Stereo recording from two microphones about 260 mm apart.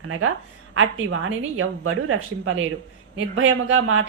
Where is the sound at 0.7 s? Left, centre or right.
Right.